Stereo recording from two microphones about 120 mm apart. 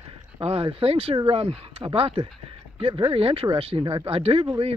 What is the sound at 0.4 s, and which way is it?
Speech, 55° right (ahead or behind).